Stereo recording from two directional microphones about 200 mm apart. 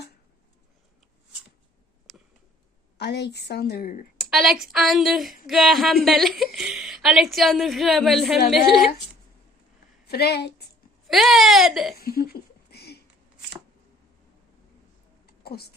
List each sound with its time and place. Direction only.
3.0 s a woman's voice: 55° left (ahead or behind)
4.3 s a woman's voice: centre (ahead or behind)
10.1 s a woman's voice: 55° left (ahead or behind)
11.1 s a woman's voice: centre (ahead or behind)
11.9 s a sound: 50° left (ahead or behind)
15.3 s a sound: 50° left (ahead or behind)